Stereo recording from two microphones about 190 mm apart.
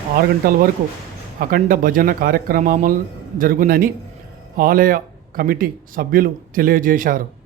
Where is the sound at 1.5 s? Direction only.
45° right (ahead or behind).